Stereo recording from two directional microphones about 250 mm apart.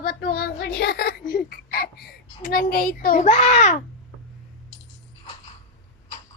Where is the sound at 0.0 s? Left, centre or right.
Left.